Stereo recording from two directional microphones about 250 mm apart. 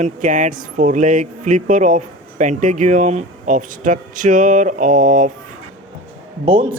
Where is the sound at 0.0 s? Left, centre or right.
Right.